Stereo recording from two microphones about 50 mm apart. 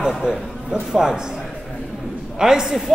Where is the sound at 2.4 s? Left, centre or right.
Centre.